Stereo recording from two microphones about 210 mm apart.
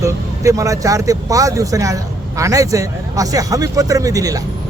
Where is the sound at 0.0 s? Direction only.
15° right (ahead or behind).